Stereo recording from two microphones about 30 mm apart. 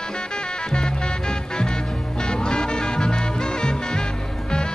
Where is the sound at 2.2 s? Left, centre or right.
Left.